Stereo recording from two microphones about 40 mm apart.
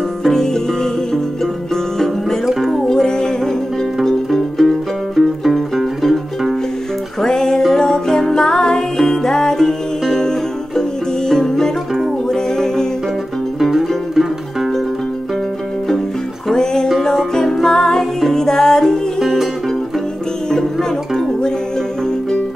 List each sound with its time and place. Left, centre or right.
2.9 s music: centre
7.2 s music: centre
13.7 s music: centre
16.5 s music: centre
19.1 s music: centre